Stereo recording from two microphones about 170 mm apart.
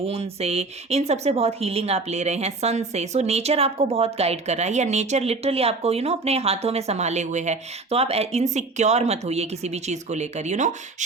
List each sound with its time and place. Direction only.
0.0 s a woman's voice: 35° right (ahead or behind)